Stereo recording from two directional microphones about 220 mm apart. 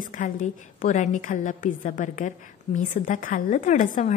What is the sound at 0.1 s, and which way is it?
A woman's voice, 35° left (ahead or behind).